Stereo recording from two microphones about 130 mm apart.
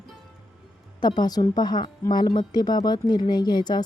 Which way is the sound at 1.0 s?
30° left (ahead or behind).